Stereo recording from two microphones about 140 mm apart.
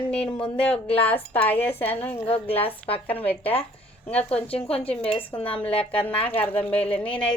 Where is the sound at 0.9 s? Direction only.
10° left (ahead or behind).